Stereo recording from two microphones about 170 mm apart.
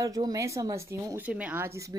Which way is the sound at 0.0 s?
20° right (ahead or behind).